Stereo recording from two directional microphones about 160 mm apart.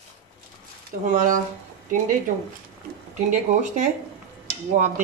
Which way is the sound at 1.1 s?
55° right (ahead or behind).